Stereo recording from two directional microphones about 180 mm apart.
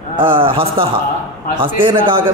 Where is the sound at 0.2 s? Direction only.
30° right (ahead or behind).